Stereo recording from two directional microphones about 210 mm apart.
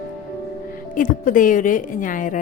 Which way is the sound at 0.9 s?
40° left (ahead or behind).